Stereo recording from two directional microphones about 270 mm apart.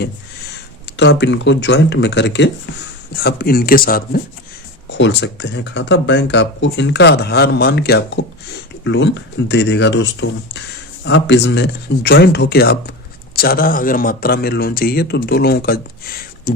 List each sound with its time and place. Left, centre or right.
0.9 s speech: left